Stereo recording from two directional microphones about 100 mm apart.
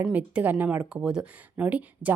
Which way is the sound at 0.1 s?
15° right (ahead or behind).